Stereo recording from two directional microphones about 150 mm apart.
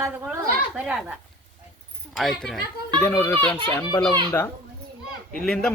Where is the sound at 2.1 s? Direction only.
Centre (ahead or behind).